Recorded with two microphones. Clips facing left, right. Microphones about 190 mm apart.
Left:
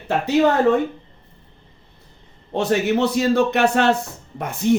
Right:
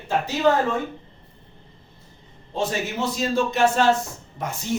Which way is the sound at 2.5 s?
65° left (ahead or behind).